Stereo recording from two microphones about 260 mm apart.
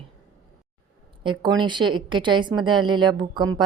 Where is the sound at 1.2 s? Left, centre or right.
Centre.